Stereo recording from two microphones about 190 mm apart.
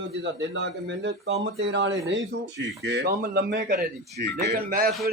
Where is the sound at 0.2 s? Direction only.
70° right (ahead or behind).